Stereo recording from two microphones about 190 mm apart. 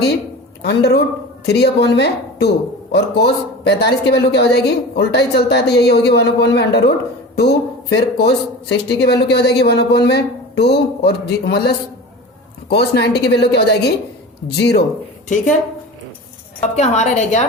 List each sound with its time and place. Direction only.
0.6 s a woman's voice: 60° left (ahead or behind)
16.7 s a woman's voice: 35° left (ahead or behind)